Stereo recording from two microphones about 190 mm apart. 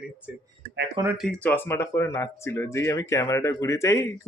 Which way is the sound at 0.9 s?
15° right (ahead or behind).